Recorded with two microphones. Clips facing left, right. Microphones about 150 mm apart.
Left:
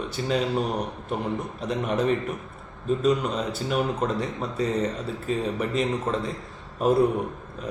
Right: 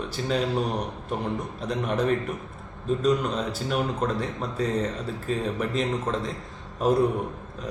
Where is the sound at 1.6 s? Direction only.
5° left (ahead or behind).